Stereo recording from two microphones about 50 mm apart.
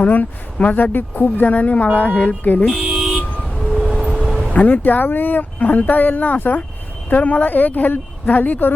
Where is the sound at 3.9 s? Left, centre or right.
Centre.